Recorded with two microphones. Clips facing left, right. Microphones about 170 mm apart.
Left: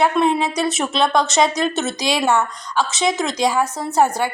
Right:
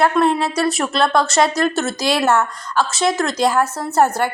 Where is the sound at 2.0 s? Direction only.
15° left (ahead or behind).